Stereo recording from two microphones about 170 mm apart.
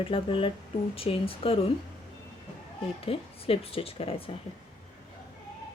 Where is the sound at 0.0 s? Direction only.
30° left (ahead or behind).